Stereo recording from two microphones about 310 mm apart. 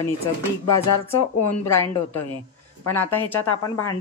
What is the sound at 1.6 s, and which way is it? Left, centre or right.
Speech, centre.